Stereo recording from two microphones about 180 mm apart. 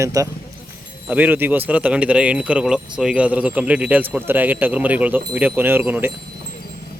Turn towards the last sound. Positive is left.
turn(degrees=-10)  # may be behind; listen again after turning